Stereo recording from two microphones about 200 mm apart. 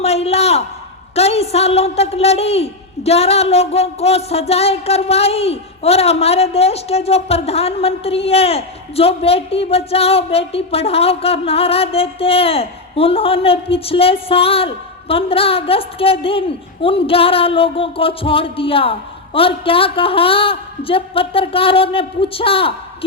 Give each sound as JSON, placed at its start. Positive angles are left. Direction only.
{"t": 0.0, "sound": "a man's voice", "side_deg": 30}